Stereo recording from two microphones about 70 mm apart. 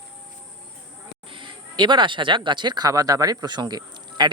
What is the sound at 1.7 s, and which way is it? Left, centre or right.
Speech, right.